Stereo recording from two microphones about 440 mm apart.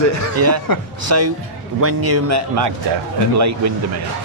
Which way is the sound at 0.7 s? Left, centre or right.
Left.